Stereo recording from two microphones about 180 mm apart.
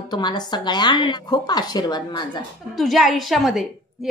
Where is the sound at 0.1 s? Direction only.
25° left (ahead or behind).